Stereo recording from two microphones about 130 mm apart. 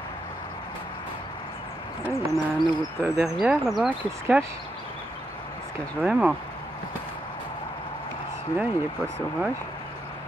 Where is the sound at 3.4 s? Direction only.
5° right (ahead or behind).